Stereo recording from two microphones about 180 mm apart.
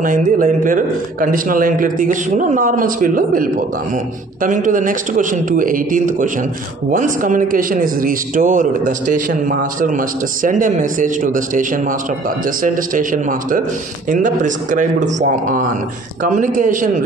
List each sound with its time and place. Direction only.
0.0 s a man's voice: 50° right (ahead or behind)